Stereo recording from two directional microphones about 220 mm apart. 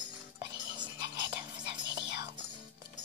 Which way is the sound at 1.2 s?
20° right (ahead or behind).